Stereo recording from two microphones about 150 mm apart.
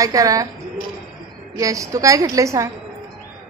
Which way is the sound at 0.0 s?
20° right (ahead or behind).